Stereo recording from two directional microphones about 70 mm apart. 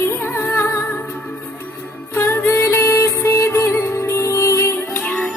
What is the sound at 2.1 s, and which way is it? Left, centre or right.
Music, left.